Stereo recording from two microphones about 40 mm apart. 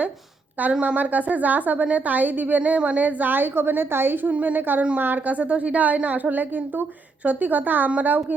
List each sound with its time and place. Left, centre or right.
0.8 s a woman's voice: right
4.3 s a woman's voice: right